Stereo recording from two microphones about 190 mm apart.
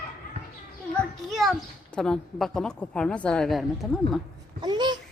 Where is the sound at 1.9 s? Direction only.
5° left (ahead or behind).